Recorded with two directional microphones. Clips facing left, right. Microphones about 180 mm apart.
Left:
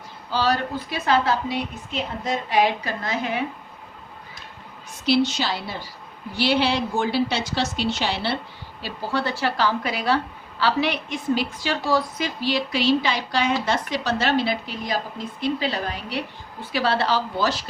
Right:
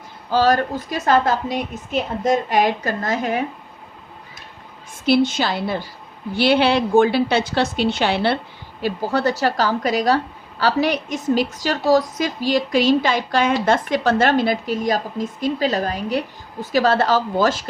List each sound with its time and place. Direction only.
0.3 s a woman's voice: 45° right (ahead or behind)
5.0 s a woman's voice: 50° right (ahead or behind)
8.8 s a woman's voice: 45° right (ahead or behind)